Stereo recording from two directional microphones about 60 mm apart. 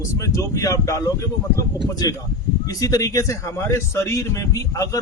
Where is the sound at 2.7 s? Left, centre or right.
Left.